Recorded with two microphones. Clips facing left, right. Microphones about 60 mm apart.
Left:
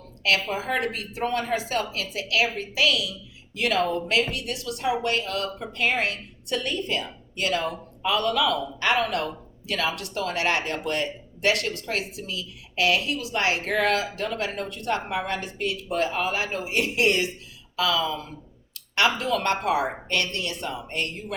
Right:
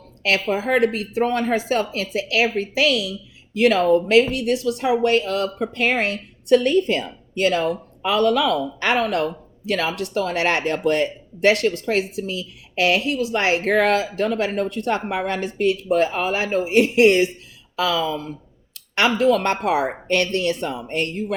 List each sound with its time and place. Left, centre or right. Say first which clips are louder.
0.2 s speech: right 4 dB; right